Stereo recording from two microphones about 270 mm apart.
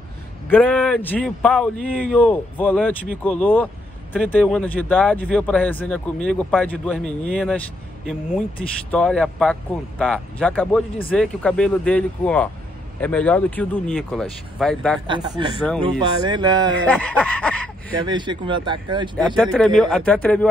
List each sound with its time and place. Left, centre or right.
0.5 s speech: centre
15.0 s speech: centre
16.8 s speech: centre
18.0 s speech: centre
19.1 s speech: centre